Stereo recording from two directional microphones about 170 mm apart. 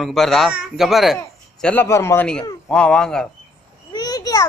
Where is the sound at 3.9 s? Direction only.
20° left (ahead or behind).